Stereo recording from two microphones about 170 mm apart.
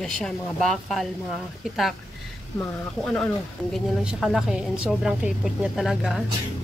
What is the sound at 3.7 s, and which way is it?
A woman's voice, centre (ahead or behind).